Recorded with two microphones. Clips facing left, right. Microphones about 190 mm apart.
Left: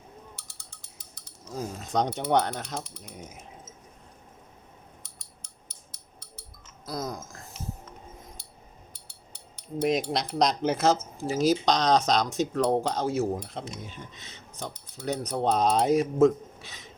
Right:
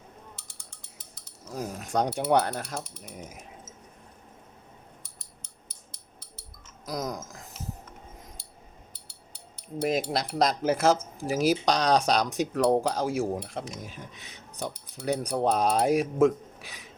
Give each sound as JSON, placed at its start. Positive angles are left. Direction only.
{"t": 1.1, "sound": "mechanisms", "side_deg": -10}
{"t": 6.8, "sound": "speech", "side_deg": -15}
{"t": 9.8, "sound": "cutlery", "side_deg": -5}
{"t": 11.3, "sound": "speech", "side_deg": -10}